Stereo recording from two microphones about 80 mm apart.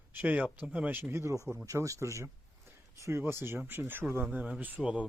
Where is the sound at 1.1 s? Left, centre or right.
Right.